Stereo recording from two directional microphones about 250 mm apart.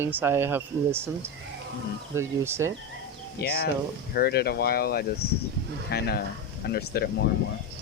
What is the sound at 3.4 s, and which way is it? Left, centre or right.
Speech, left.